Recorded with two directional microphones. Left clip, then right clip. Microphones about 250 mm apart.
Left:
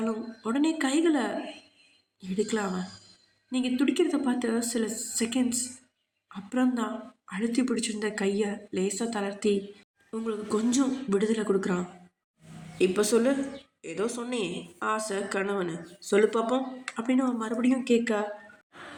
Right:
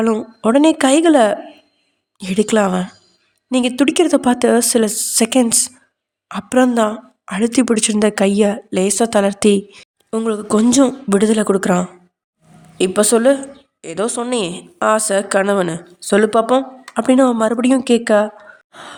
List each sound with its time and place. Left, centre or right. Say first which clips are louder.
0.0 s a woman's voice: right 16 dB; right